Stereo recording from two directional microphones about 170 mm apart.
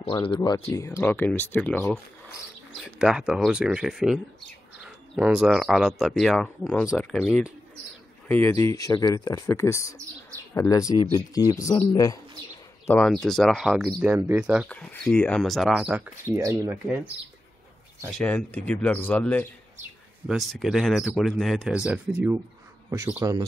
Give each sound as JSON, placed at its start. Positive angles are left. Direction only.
{"t": 0.0, "sound": "speech", "side_deg": 30}
{"t": 2.7, "sound": "speech", "side_deg": 0}
{"t": 12.8, "sound": "speech", "side_deg": 5}
{"t": 14.7, "sound": "speech", "side_deg": 5}
{"t": 18.1, "sound": "speech", "side_deg": 5}